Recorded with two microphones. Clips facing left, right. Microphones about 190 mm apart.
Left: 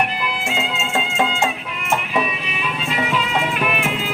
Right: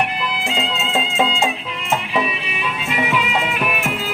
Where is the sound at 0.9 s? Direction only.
15° right (ahead or behind).